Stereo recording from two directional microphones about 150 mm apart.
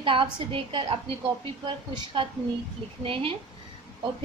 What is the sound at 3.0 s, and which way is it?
Speech, 35° right (ahead or behind).